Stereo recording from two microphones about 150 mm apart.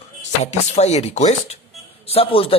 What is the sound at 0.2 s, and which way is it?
A woman's voice, 45° left (ahead or behind).